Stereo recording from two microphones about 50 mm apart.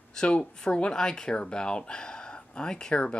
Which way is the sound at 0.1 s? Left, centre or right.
Centre.